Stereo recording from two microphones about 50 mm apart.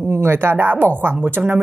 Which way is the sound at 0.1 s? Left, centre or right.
Right.